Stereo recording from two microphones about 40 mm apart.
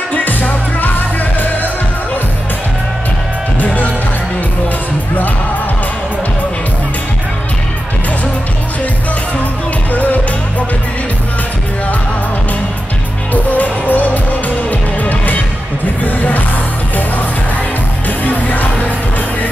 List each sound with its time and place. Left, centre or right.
0.1 s music: left
3.5 s music: left
13.3 s music: left
18.2 s music: left